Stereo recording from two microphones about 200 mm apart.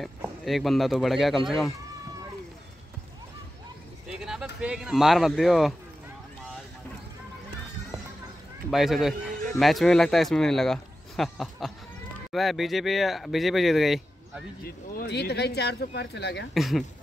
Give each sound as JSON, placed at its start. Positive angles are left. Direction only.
{"t": 0.2, "sound": "speech", "side_deg": 0}
{"t": 4.2, "sound": "speech", "side_deg": -5}
{"t": 8.6, "sound": "speech", "side_deg": 0}
{"t": 15.0, "sound": "speech", "side_deg": 55}
{"t": 16.5, "sound": "speech", "side_deg": 0}